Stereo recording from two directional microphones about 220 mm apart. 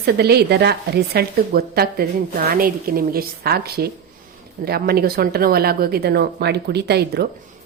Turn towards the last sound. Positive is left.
turn(degrees=-45)  # may be behind; listen again after turning